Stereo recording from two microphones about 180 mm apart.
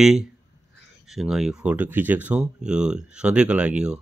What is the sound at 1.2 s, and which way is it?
Speech, 5° right (ahead or behind).